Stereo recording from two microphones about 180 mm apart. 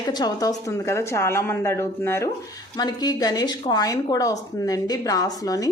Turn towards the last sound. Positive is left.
turn(degrees=20)  # may be behind; listen again after turning